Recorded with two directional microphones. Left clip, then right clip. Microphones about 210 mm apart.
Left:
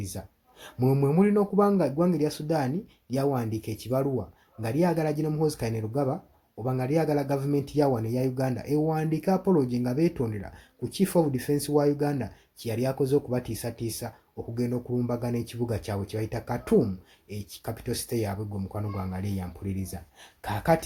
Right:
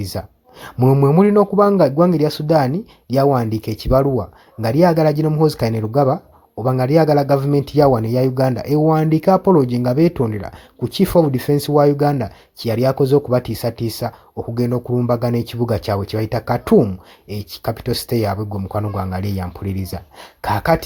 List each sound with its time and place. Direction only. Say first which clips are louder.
0.0 s speech: right 13 dB; 35° right (ahead or behind)